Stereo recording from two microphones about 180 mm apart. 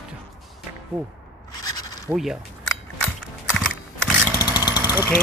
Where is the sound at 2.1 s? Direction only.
5° right (ahead or behind).